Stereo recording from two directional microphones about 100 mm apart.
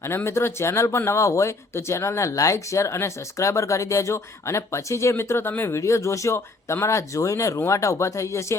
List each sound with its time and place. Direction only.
0.0 s speech: 25° left (ahead or behind)